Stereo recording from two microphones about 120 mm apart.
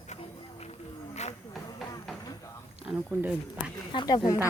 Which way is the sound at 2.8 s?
5° right (ahead or behind).